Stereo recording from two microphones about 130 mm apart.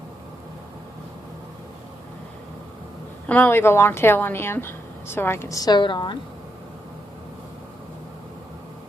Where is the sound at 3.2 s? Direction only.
10° left (ahead or behind); by 6.1 s 40° left (ahead or behind).